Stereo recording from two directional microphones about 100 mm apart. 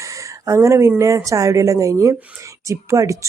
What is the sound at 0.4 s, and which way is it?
Speech, 30° right (ahead or behind).